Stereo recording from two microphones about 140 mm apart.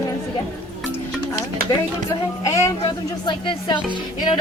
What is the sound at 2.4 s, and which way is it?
Speech, 25° left (ahead or behind).